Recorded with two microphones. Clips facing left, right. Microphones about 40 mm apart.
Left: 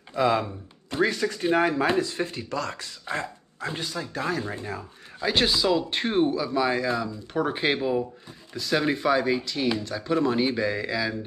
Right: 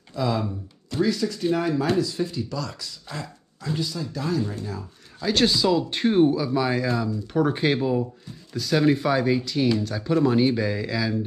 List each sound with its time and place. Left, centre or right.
0.1 s speech: left
5.2 s speech: centre